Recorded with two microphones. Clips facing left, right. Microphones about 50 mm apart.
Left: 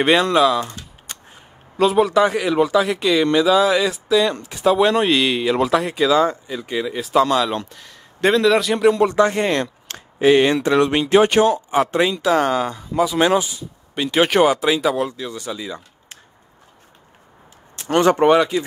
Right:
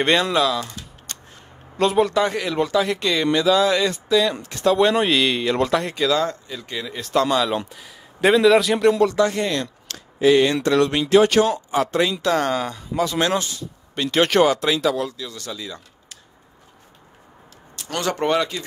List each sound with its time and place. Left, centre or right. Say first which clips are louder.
0.0 s speech: left 4 dB; centre
0.6 s typing: left 4 dB; centre
1.8 s speech: left 3 dB; centre
9.0 s speech: left 2 dB; left
12.1 s speech: left 3 dB; centre
15.0 s speech: left 4 dB; left
17.7 s a sound: left 9 dB; left
18.1 s speech: left 6 dB; centre